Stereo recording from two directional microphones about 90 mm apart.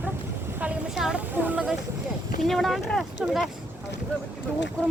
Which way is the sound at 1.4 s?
20° right (ahead or behind).